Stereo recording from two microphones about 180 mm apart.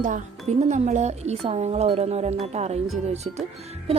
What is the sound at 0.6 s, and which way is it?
Speech, 40° right (ahead or behind).